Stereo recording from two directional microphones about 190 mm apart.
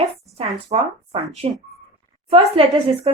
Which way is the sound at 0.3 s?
30° right (ahead or behind).